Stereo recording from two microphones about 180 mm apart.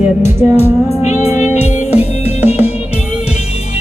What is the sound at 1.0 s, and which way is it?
Music, 40° left (ahead or behind).